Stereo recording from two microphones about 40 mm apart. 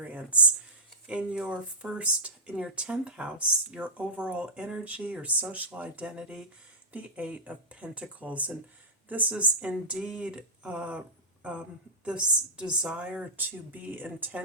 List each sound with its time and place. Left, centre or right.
0.0 s a sound: right
1.0 s speech: right
9.3 s speech: right
12.0 s a woman's voice: right
13.3 s speech: right